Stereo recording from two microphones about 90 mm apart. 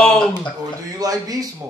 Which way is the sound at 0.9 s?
45° right (ahead or behind).